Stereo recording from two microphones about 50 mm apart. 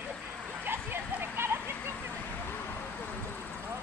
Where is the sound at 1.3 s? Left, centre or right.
Right.